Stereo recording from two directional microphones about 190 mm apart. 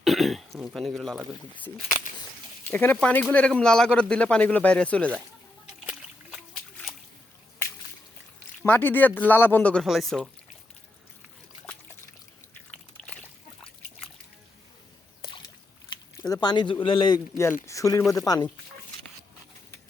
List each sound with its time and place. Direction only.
0.0 s throat clearing: centre (ahead or behind)
0.6 s speech: centre (ahead or behind)
5.8 s splash: 5° right (ahead or behind)
8.6 s speech: 10° left (ahead or behind)
15.9 s a sound: 25° left (ahead or behind)
16.3 s a man's voice: 20° left (ahead or behind)